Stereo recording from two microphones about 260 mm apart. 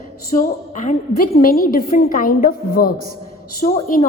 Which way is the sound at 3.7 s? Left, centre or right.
Left.